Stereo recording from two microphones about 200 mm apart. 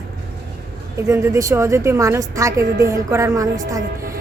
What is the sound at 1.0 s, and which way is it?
A woman's voice, 15° right (ahead or behind).